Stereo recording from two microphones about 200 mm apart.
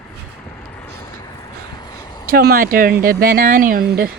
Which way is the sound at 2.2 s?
50° right (ahead or behind).